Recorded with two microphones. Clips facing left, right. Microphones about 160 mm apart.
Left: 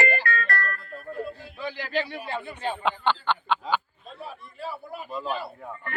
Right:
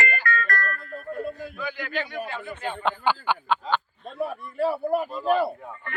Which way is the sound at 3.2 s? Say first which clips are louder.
Right 1 dB; 10° right (ahead or behind).